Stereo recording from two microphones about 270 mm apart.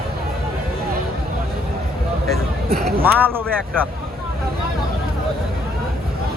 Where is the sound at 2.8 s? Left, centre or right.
Centre.